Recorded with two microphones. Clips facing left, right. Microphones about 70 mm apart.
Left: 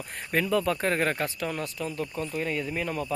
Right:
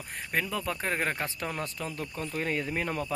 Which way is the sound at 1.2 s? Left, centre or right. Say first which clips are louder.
Left 3 dB; right.